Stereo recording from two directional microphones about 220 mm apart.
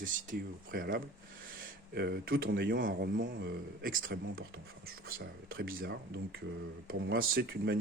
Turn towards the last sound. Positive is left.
turn(degrees=-45)  # may be behind; listen again after turning